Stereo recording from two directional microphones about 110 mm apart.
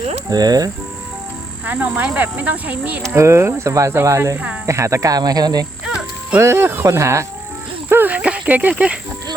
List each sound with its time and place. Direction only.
0.3 s speech: 35° right (ahead or behind)
1.6 s speech: 15° right (ahead or behind)
3.1 s speech: 25° right (ahead or behind)
5.8 s livestock: 5° right (ahead or behind)
6.4 s speech: 20° right (ahead or behind)